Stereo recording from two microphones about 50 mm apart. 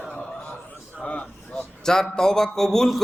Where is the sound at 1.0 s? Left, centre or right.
Left.